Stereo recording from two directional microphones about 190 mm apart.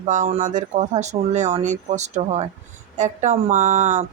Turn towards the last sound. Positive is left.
turn(degrees=-40)  # may be behind; listen again after turning